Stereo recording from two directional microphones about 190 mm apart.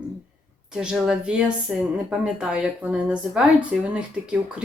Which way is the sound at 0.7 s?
5° right (ahead or behind).